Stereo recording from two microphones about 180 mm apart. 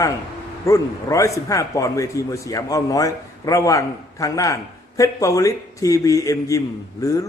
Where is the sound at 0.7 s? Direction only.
15° left (ahead or behind).